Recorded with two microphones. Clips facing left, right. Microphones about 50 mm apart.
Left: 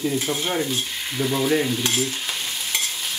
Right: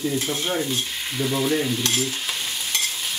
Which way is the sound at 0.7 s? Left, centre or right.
Centre.